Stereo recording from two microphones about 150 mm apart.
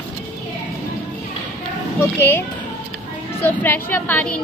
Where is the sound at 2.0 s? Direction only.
15° left (ahead or behind).